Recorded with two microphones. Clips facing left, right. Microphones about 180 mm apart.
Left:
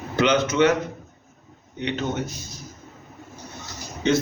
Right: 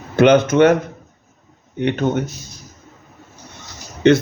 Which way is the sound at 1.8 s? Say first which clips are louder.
Right 8 dB; 55° right (ahead or behind).